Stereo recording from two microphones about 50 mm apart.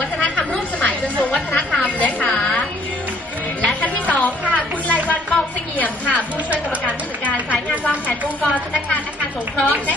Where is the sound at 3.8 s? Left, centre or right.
Left.